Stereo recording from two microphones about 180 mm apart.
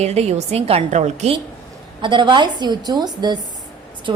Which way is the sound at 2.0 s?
25° right (ahead or behind).